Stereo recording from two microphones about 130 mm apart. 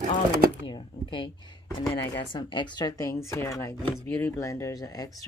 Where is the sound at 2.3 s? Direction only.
35° left (ahead or behind).